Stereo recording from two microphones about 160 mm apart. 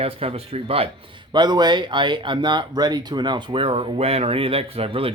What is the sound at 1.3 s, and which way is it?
Speech, 25° right (ahead or behind).